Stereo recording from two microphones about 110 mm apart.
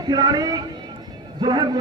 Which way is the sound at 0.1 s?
35° right (ahead or behind).